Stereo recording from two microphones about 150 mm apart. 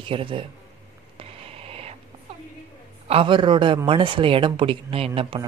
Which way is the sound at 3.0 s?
35° right (ahead or behind).